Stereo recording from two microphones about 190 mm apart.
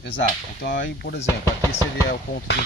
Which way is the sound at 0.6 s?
55° left (ahead or behind).